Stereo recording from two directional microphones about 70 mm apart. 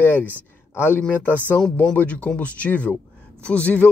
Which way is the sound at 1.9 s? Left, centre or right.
Centre.